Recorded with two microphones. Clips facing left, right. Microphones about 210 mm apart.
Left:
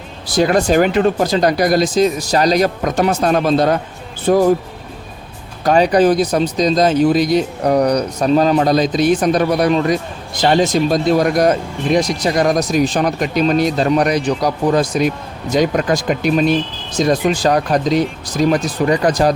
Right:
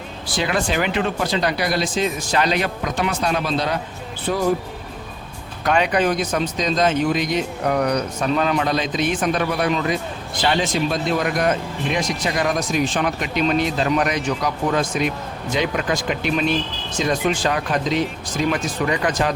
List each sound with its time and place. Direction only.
0.3 s speech: 40° left (ahead or behind)
5.6 s speech: 35° left (ahead or behind)